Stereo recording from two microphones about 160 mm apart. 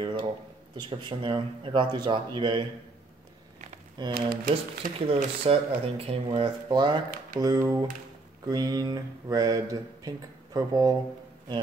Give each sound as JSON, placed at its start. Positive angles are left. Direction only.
{"t": 0.0, "sound": "a sound", "side_deg": -25}
{"t": 0.7, "sound": "speech", "side_deg": -30}
{"t": 4.1, "sound": "speech", "side_deg": -65}
{"t": 5.0, "sound": "speech", "side_deg": -35}